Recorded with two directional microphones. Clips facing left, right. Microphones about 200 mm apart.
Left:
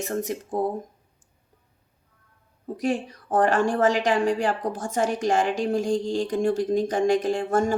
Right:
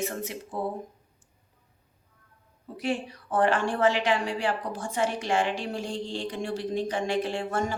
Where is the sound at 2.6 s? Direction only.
45° left (ahead or behind).